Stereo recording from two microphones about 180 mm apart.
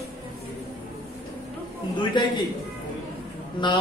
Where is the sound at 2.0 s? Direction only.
25° left (ahead or behind).